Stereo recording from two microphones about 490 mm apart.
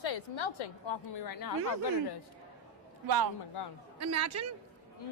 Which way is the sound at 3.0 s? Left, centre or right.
Right.